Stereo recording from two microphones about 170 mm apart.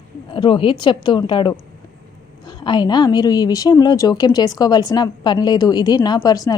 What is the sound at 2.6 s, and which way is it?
A woman's voice, 25° left (ahead or behind).